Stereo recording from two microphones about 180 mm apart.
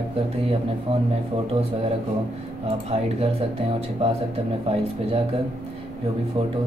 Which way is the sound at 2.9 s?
35° right (ahead or behind).